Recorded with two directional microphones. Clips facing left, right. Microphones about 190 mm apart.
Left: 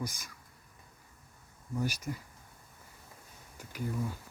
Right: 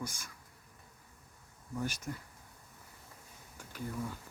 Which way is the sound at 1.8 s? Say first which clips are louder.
Left 3 dB; 10° left (ahead or behind).